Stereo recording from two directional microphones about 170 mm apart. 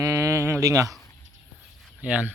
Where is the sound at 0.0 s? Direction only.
20° right (ahead or behind).